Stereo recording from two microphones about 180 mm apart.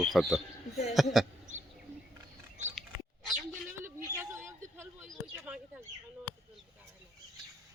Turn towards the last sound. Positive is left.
turn(degrees=-5)  # may be behind; listen again after turning